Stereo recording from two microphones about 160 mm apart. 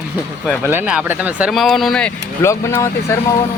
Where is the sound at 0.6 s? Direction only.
10° right (ahead or behind).